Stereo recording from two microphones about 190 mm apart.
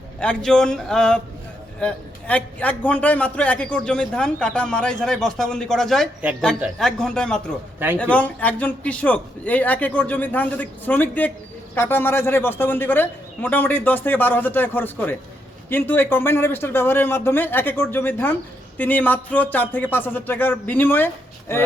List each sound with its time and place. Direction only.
0.2 s a man's voice: 5° left (ahead or behind)